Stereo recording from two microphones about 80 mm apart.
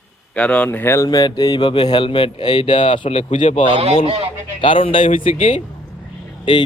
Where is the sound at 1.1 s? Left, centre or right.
Left.